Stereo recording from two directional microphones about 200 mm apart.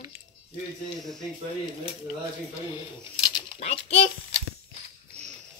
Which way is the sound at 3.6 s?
30° left (ahead or behind).